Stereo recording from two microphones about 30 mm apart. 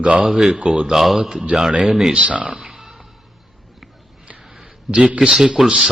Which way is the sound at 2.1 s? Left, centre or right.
Right.